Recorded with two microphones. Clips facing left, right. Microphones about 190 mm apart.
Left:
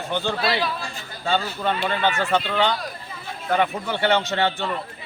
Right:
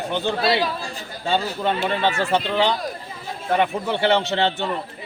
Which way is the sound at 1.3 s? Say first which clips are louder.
Right 1 dB; 20° right (ahead or behind).